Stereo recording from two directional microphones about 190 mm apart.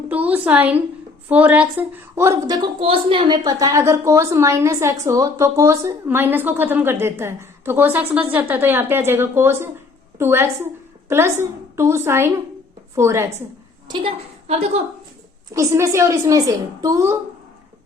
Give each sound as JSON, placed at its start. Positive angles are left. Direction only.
{"t": 0.1, "sound": "a woman's voice", "side_deg": -10}
{"t": 13.8, "sound": "a woman's voice", "side_deg": -25}
{"t": 15.5, "sound": "a woman's voice", "side_deg": -15}